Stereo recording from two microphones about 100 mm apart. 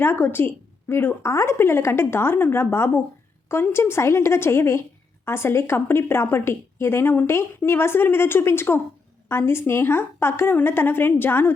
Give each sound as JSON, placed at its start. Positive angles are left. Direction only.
{"t": 0.0, "sound": "a woman's voice", "side_deg": 25}